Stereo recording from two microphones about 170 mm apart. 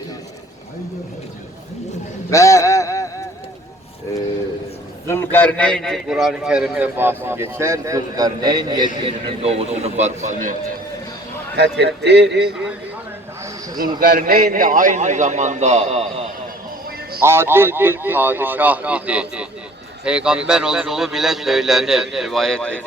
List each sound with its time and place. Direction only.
2.3 s a sound: 20° left (ahead or behind)
5.0 s a man's voice: 15° left (ahead or behind); by 10.6 s 45° right (ahead or behind)
11.5 s a man's voice: 80° right
14.0 s a man's voice: 55° right (ahead or behind); by 16.2 s 35° right (ahead or behind)
17.2 s a man's voice: 15° right (ahead or behind); by 22.8 s 5° left (ahead or behind)